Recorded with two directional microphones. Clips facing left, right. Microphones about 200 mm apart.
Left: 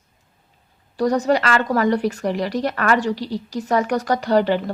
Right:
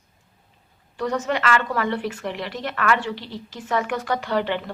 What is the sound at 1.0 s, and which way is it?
A woman's voice, 35° left (ahead or behind).